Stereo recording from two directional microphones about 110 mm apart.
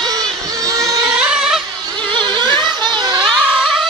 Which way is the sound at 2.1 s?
45° right (ahead or behind).